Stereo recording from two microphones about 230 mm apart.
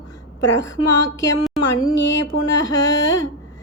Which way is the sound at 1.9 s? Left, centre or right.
Left.